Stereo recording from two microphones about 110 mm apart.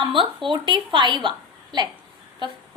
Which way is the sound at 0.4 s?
45° right (ahead or behind).